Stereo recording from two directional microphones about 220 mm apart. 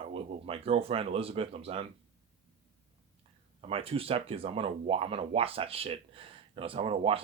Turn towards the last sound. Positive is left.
turn(degrees=-25)  # may be behind; listen again after turning